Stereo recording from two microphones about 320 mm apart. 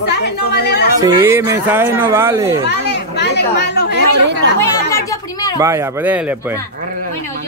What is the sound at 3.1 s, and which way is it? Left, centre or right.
Chatter, left.